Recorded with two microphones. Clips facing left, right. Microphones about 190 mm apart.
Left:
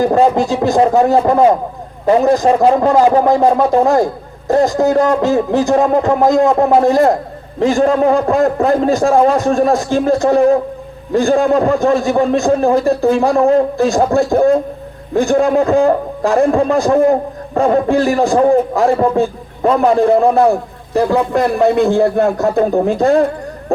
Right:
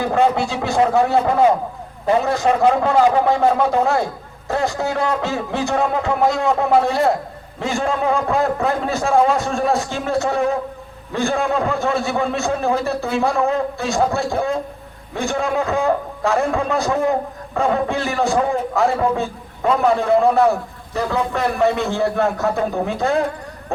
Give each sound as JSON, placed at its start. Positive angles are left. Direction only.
{"t": 0.0, "sound": "a man's voice", "side_deg": 40}